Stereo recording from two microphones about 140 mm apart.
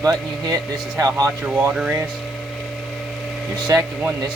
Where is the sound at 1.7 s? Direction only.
10° right (ahead or behind).